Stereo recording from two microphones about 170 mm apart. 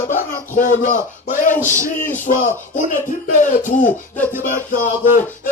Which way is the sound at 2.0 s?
10° left (ahead or behind).